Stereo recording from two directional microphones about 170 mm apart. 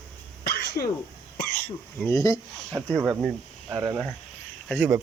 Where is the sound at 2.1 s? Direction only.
20° left (ahead or behind).